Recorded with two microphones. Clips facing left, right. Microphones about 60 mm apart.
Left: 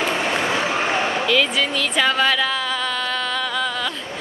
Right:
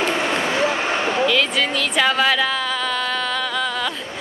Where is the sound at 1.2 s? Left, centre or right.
Centre.